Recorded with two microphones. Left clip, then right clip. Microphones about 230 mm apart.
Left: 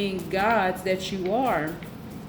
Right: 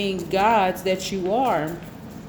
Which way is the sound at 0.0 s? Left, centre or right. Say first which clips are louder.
Right 4 dB; right.